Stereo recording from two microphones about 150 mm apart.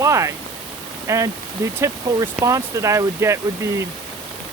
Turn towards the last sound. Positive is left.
turn(degrees=-20)  # may be behind; listen again after turning